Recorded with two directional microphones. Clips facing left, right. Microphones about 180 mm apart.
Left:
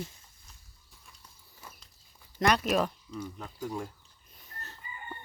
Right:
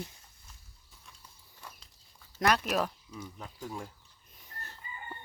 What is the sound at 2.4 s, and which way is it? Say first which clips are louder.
Speech: left 2 dB; 5° right (ahead or behind).